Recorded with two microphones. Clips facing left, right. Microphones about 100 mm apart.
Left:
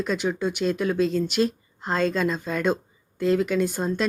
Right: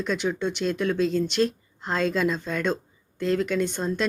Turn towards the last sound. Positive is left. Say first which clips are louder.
# left 2 dB
turn(degrees=5)  # may be behind; listen again after turning